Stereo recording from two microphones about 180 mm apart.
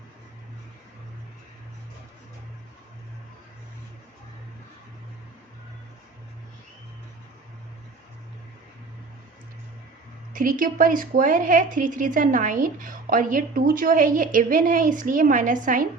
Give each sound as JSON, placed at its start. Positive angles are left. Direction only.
{"t": 10.3, "sound": "speech", "side_deg": -50}